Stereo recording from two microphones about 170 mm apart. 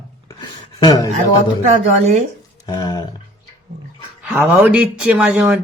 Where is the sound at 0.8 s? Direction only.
20° left (ahead or behind).